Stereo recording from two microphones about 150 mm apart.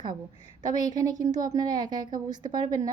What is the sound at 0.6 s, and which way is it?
A woman's voice, 25° right (ahead or behind).